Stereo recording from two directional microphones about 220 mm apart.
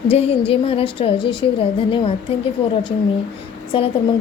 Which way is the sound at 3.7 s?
25° left (ahead or behind).